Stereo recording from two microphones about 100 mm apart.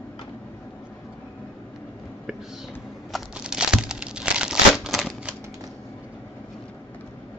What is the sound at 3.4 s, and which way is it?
Crumpling, 5° right (ahead or behind).